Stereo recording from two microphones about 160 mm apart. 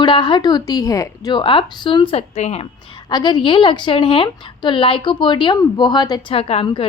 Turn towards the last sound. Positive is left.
turn(degrees=35)  # may be behind; listen again after turning